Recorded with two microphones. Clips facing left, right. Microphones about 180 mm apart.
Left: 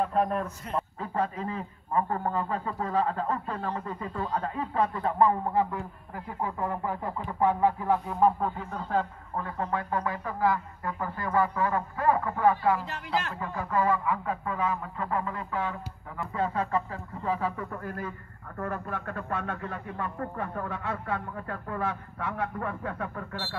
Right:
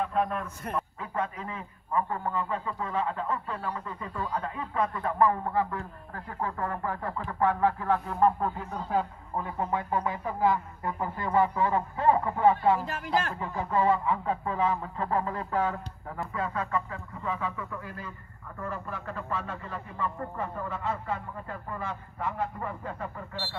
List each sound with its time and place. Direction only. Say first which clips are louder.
0.0 s a man's voice: left 2 dB; 40° left (ahead or behind); by 8.3 s 10° left (ahead or behind)
8.4 s speech: even; centre (ahead or behind)
8.8 s speech: even; 10° right (ahead or behind); by 12.8 s 25° right (ahead or behind)
12.8 s speech: right 2 dB; 45° right (ahead or behind)
13.4 s speech: right 1 dB; 25° right (ahead or behind)
16.3 s a man's voice: left 3 dB; 30° left (ahead or behind); by 23.2 s 65° left (ahead or behind)